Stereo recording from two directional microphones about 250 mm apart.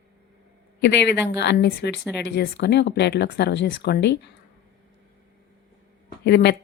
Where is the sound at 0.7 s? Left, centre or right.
Left.